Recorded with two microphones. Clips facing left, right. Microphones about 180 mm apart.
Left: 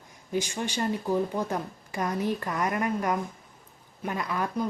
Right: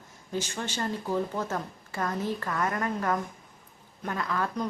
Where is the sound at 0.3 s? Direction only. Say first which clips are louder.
Left 3 dB; 15° left (ahead or behind).